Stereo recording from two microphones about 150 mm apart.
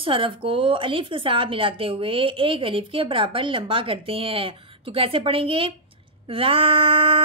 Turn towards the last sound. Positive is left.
turn(degrees=-40)  # may be behind; listen again after turning